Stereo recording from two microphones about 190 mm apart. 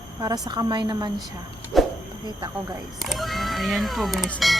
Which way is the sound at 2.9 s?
Centre (ahead or behind).